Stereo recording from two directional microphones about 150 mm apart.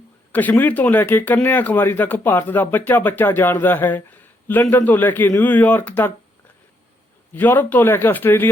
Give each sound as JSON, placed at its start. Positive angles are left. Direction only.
{"t": 0.3, "sound": "speech", "side_deg": 10}
{"t": 7.3, "sound": "speech", "side_deg": 15}